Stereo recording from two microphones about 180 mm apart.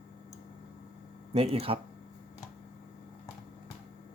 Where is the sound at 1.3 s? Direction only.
30° right (ahead or behind).